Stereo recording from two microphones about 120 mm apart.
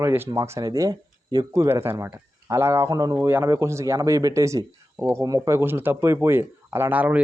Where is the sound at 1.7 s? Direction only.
20° right (ahead or behind).